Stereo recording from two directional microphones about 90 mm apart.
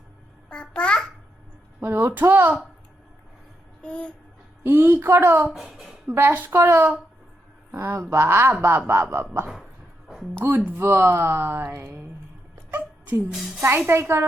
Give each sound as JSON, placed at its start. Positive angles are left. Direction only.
{"t": 0.5, "sound": "a child's voice", "side_deg": 10}
{"t": 1.8, "sound": "speech", "side_deg": -25}
{"t": 3.8, "sound": "a sound", "side_deg": 10}
{"t": 4.6, "sound": "speech", "side_deg": -25}
{"t": 5.5, "sound": "speech", "side_deg": -5}
{"t": 6.1, "sound": "speech", "side_deg": -25}
{"t": 10.7, "sound": "speech", "side_deg": -25}
{"t": 12.7, "sound": "cat", "side_deg": -25}
{"t": 13.3, "sound": "speech", "side_deg": 0}
{"t": 13.6, "sound": "speech", "side_deg": -25}